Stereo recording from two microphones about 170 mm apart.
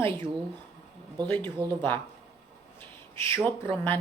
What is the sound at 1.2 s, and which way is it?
Speech, 10° left (ahead or behind).